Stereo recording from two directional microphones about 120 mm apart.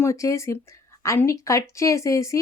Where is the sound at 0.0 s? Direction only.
25° left (ahead or behind).